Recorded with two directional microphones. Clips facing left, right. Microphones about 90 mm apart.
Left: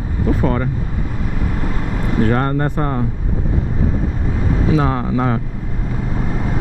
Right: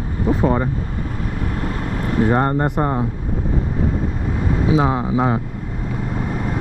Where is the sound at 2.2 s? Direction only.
20° right (ahead or behind).